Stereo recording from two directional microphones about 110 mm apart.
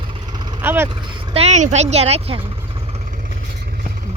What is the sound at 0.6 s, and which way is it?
Speech, 20° right (ahead or behind).